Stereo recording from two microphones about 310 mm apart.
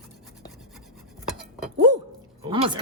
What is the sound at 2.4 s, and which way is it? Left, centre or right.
Speech, centre.